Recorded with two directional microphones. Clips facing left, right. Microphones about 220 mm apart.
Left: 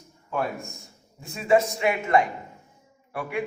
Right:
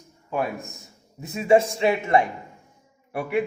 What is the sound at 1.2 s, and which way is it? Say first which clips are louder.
A man's voice: right 3 dB; 20° right (ahead or behind).